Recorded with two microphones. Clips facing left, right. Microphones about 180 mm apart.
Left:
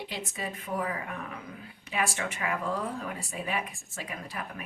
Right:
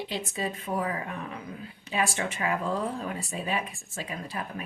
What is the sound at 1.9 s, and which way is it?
Speech, 30° right (ahead or behind).